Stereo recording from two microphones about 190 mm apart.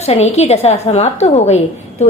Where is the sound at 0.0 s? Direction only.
35° left (ahead or behind).